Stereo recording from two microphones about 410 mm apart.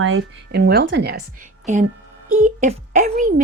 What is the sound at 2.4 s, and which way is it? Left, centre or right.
Speech, centre.